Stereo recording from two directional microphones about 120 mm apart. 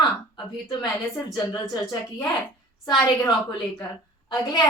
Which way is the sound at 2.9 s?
35° left (ahead or behind).